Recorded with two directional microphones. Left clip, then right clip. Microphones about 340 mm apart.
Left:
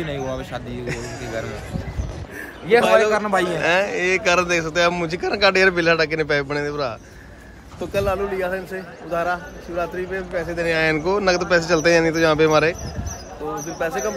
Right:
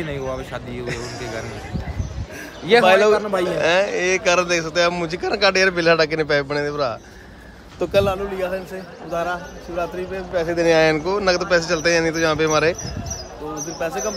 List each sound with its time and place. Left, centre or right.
0.1 s a man's voice: centre
2.7 s a man's voice: right
3.4 s a man's voice: centre
8.1 s a man's voice: centre
10.5 s a man's voice: centre
13.7 s a man's voice: centre